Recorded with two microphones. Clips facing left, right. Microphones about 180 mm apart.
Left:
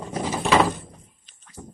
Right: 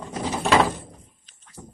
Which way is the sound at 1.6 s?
10° left (ahead or behind).